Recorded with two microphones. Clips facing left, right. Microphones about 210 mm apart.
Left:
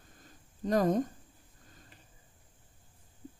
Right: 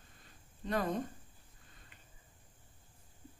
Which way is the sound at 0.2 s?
40° left (ahead or behind).